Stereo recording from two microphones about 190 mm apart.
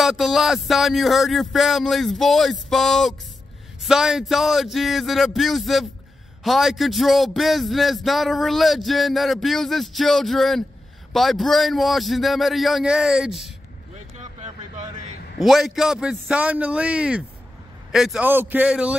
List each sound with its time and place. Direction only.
0.0 s a man's voice: centre (ahead or behind)
14.1 s a sound: 35° right (ahead or behind)
15.3 s a man's voice: centre (ahead or behind)